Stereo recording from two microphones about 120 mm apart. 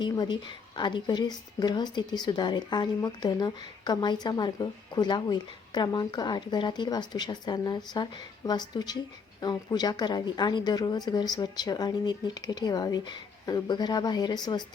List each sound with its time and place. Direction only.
0.0 s a woman's voice: 40° left (ahead or behind)